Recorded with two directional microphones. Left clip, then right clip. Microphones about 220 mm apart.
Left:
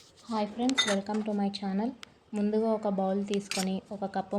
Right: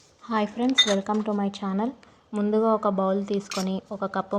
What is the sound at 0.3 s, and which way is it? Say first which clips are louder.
A woman's voice: right 7 dB; 25° right (ahead or behind).